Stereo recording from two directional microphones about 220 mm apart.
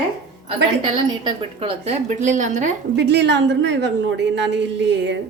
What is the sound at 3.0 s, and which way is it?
A woman's voice, 50° right (ahead or behind).